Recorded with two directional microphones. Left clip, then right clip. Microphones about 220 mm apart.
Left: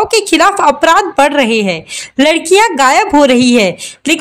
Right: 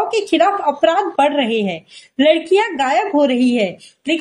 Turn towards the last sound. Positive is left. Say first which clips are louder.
# left 8 dB
turn(degrees=55)  # may be behind; listen again after turning